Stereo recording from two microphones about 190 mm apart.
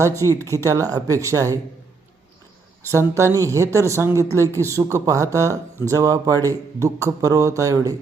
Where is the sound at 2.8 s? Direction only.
15° right (ahead or behind).